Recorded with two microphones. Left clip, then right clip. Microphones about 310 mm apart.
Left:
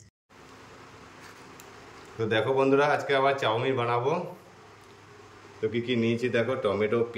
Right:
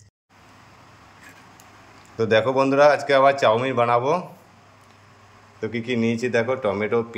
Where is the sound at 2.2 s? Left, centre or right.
Centre.